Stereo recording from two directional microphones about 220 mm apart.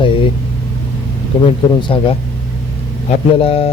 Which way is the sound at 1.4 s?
25° left (ahead or behind).